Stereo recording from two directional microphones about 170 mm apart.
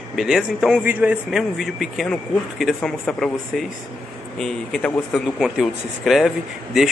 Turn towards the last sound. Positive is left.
turn(degrees=0)  # may be behind; listen again after turning